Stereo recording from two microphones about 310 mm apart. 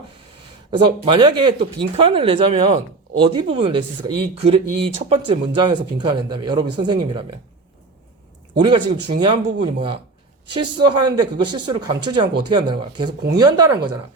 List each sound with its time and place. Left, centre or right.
0.7 s speech: centre
8.5 s speech: centre